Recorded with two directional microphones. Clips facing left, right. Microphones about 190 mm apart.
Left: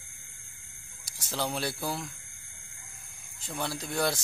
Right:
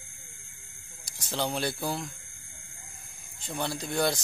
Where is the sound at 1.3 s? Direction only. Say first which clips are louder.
Right 2 dB; centre (ahead or behind).